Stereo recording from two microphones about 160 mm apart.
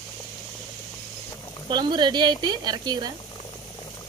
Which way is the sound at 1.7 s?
25° right (ahead or behind).